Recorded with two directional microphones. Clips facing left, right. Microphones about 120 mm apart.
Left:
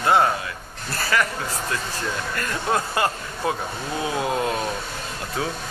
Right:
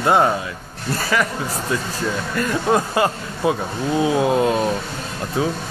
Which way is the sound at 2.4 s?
15° right (ahead or behind).